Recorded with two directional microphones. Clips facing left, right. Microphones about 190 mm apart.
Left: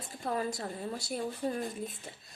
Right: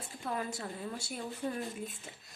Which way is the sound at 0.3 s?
40° left (ahead or behind).